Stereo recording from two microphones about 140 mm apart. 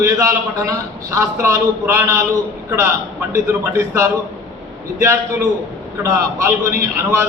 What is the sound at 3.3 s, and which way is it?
Speech, 20° right (ahead or behind).